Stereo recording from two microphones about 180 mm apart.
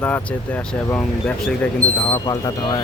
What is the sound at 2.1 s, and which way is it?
Speech, 20° left (ahead or behind).